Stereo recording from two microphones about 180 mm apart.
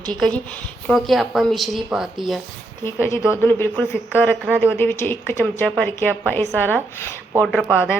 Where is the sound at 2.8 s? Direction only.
15° left (ahead or behind).